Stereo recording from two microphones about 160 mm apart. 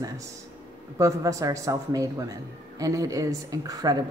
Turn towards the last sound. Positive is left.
turn(degrees=-25)  # may be behind; listen again after turning